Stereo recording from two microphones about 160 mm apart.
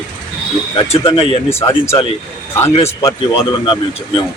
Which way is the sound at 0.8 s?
30° left (ahead or behind).